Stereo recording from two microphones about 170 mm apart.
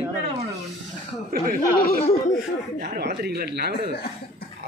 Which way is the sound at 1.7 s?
60° left (ahead or behind).